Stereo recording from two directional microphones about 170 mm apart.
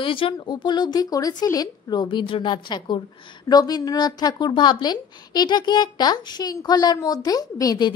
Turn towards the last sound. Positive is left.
turn(degrees=20)  # may be behind; listen again after turning